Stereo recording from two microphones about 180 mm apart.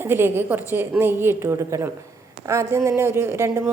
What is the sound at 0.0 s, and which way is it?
A woman's voice, 10° right (ahead or behind).